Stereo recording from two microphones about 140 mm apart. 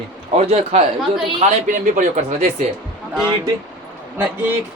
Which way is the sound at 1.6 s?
65° right (ahead or behind).